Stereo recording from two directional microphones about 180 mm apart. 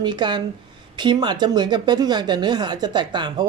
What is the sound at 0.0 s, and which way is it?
Speech, 25° right (ahead or behind).